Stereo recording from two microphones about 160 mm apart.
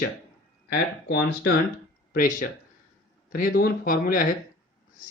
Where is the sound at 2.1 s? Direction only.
60° left (ahead or behind).